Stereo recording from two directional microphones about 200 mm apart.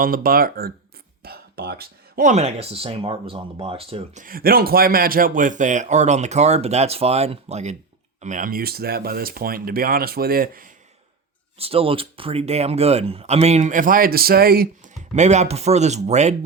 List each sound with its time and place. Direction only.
0.0 s speech: 45° right (ahead or behind); by 4.2 s 30° right (ahead or behind)
4.2 s speech: 45° right (ahead or behind)
11.5 s speech: 30° right (ahead or behind)